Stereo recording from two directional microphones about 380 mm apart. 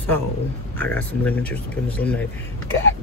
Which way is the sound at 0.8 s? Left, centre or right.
Centre.